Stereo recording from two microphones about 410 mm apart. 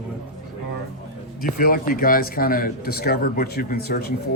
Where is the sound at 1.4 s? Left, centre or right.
Left.